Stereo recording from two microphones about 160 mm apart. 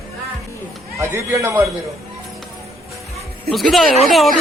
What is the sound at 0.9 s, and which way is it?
Speech, 20° right (ahead or behind).